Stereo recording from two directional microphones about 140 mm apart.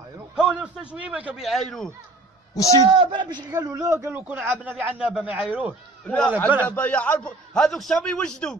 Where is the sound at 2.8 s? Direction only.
35° right (ahead or behind); by 5.7 s 10° right (ahead or behind).